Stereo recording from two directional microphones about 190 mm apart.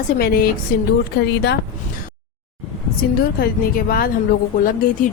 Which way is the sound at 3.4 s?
50° left (ahead or behind).